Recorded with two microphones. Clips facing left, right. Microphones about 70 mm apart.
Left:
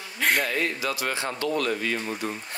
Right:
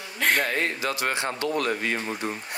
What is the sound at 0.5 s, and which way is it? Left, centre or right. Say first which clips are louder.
Speech: even; right.